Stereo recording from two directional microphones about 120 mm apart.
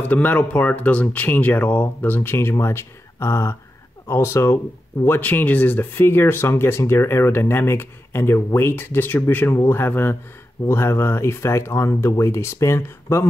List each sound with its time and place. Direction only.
0.0 s speech: 15° left (ahead or behind)